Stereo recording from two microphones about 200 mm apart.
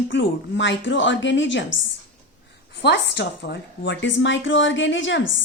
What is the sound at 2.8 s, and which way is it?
A woman's voice, 60° left (ahead or behind).